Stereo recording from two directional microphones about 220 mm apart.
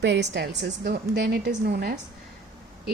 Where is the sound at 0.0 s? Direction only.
55° right (ahead or behind).